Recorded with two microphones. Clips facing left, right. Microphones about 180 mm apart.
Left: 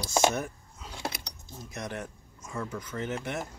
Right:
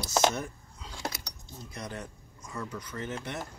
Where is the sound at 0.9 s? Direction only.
25° left (ahead or behind).